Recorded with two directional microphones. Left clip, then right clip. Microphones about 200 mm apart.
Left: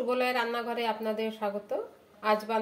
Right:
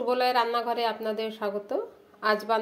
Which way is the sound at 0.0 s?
40° right (ahead or behind).